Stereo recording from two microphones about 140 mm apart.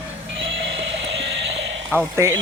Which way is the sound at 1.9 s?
20° right (ahead or behind).